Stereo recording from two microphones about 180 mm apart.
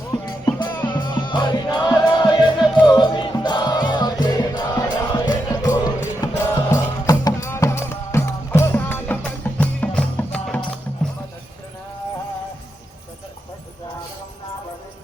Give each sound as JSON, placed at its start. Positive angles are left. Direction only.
{"t": 0.1, "sound": "music", "side_deg": 25}